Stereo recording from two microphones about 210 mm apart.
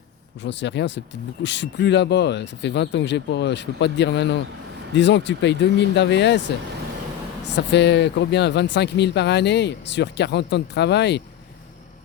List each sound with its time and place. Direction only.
0.4 s speech: 55° left (ahead or behind)
7.5 s speech: 55° left (ahead or behind)